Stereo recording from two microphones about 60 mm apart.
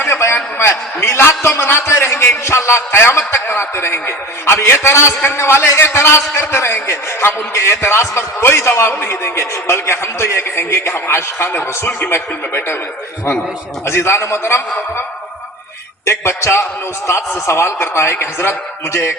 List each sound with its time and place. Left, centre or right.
0.0 s a sound: left
0.6 s a man's voice: left
11.9 s a man's voice: left
12.1 s a man's voice: left
13.8 s a man's voice: left
16.0 s a man's voice: left